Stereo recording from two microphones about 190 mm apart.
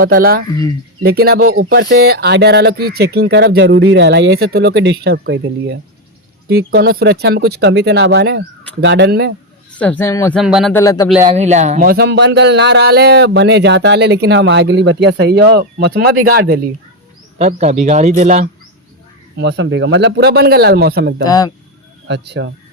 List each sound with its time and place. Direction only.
0.0 s speech: 50° right (ahead or behind)
1.4 s speech: 85° right
2.0 s speech: 55° right (ahead or behind)
6.5 s speech: 55° right (ahead or behind)
9.7 s speech: 10° left (ahead or behind)
10.3 s speech: centre (ahead or behind)
10.7 s speech: 15° left (ahead or behind)
11.3 s speech: 35° right (ahead or behind); by 16.6 s 55° right (ahead or behind)
17.3 s speech: 40° right (ahead or behind)
19.4 s speech: 65° right (ahead or behind)
21.2 s speech: 20° left (ahead or behind)
22.0 s speech: 65° right (ahead or behind)